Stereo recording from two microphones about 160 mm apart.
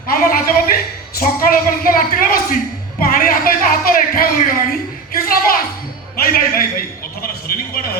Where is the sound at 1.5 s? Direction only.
65° left (ahead or behind).